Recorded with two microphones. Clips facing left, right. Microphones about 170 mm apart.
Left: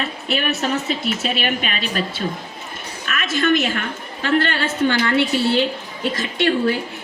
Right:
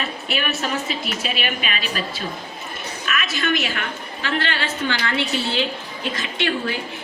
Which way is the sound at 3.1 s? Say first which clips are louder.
Left 5 dB; 50° left (ahead or behind).